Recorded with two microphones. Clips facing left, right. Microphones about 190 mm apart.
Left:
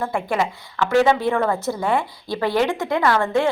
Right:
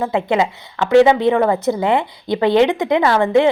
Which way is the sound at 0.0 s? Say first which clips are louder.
Right 5 dB; 20° right (ahead or behind).